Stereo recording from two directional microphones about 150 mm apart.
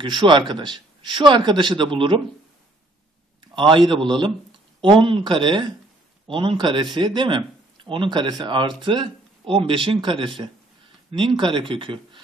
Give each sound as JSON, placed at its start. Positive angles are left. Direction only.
{"t": 0.0, "sound": "speech", "side_deg": -30}
{"t": 3.5, "sound": "speech", "side_deg": -35}